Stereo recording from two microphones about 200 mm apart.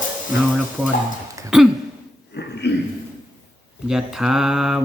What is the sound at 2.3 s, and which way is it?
Speech, 60° left (ahead or behind).